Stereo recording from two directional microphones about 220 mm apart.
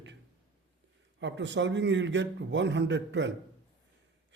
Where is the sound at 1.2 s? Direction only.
55° right (ahead or behind).